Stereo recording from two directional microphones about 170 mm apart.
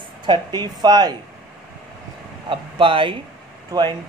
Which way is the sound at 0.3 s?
25° right (ahead or behind).